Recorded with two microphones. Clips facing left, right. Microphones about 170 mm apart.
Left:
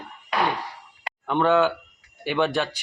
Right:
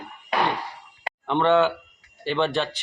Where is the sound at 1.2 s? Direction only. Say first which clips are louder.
Even; 5° left (ahead or behind).